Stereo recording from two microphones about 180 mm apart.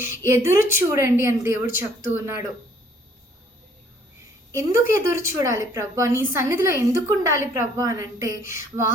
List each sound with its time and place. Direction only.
0.0 s a woman's voice: 15° right (ahead or behind)
4.5 s a woman's voice: 15° right (ahead or behind)